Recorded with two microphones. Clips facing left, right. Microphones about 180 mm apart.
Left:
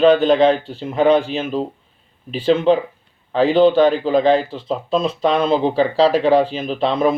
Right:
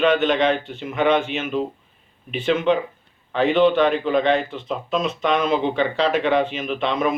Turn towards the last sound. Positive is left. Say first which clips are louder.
# left 4 dB
turn(degrees=35)  # may be behind; listen again after turning